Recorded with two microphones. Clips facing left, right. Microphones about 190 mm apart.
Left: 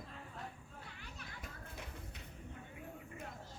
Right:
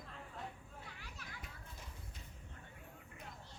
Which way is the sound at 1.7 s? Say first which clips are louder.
Left 5 dB; 70° left (ahead or behind).